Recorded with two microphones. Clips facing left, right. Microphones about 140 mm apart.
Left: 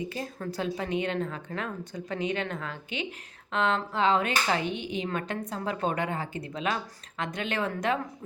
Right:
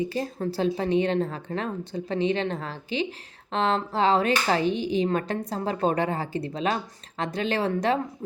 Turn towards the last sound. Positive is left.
turn(degrees=-35)  # may be behind; listen again after turning